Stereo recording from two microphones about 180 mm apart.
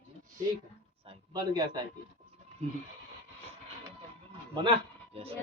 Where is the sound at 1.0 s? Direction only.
25° right (ahead or behind).